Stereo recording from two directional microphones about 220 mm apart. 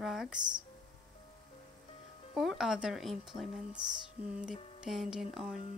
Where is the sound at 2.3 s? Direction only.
Centre (ahead or behind).